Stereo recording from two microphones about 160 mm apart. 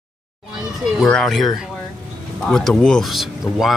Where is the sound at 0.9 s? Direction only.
5° left (ahead or behind).